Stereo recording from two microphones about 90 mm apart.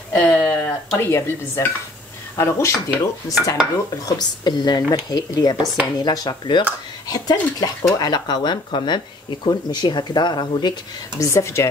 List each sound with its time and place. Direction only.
0.1 s a sound: 20° left (ahead or behind)
0.9 s a woman's voice: 30° left (ahead or behind)
2.3 s dishes: 35° left (ahead or behind)
4.0 s speech: 50° left (ahead or behind)
11.1 s dishes: 35° left (ahead or behind)